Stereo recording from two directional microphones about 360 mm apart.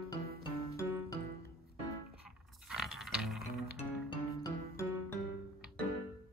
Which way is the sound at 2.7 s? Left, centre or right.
Centre.